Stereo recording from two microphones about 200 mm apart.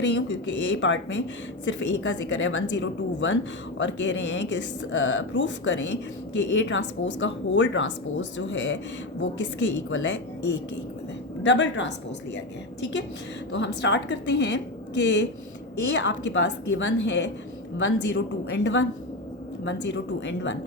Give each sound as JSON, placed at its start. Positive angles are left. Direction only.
{"t": 0.0, "sound": "a woman's voice", "side_deg": 65}
{"t": 11.4, "sound": "speech", "side_deg": 65}